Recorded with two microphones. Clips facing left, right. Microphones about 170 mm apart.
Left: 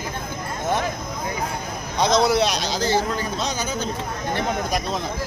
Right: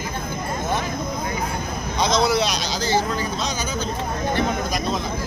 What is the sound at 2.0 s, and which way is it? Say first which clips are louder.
Speech: left 2 dB; 60° left (ahead or behind).